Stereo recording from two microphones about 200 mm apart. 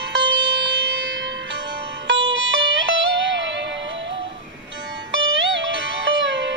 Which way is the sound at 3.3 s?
65° right (ahead or behind).